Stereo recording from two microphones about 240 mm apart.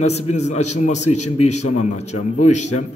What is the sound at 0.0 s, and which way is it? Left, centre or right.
A man's voice, left.